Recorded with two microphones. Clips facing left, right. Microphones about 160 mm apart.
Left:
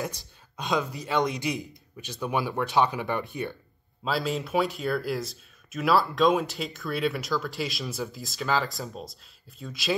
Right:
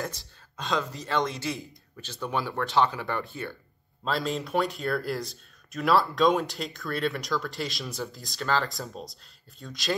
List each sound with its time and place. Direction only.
0.0 s speech: 15° left (ahead or behind)
4.0 s speech: 5° left (ahead or behind)